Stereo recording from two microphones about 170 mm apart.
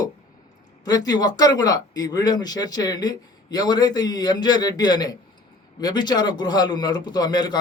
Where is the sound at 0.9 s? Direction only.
20° left (ahead or behind).